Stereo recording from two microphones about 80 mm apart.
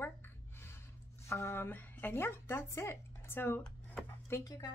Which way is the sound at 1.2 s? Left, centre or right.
Left.